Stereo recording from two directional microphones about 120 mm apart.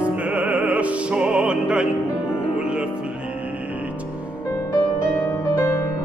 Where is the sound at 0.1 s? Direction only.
10° right (ahead or behind).